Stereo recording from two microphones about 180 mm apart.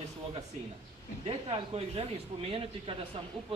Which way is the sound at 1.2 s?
35° right (ahead or behind).